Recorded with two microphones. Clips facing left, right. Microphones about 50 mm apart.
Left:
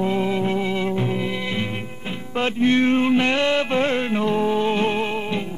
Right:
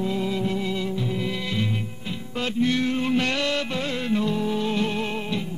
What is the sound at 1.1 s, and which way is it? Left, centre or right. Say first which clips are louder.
Music: left 2 dB; left.